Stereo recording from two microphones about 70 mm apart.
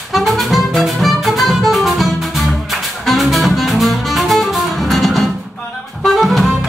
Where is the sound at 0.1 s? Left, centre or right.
Centre.